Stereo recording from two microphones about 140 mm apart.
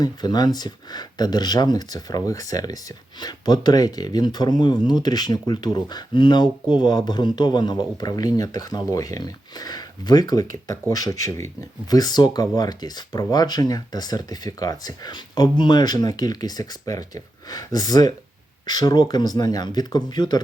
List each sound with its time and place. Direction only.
0.0 s speech: 30° left (ahead or behind)